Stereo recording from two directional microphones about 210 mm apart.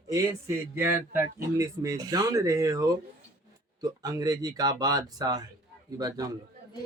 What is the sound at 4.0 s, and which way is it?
A man's voice, 15° right (ahead or behind).